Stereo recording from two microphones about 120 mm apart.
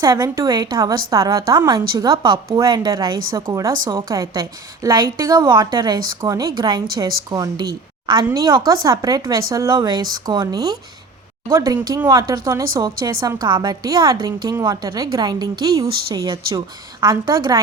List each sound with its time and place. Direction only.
0.0 s a woman's voice: 30° right (ahead or behind)
3.7 s a woman's voice: 40° right (ahead or behind)